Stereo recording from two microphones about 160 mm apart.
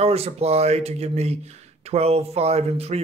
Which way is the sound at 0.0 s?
40° right (ahead or behind).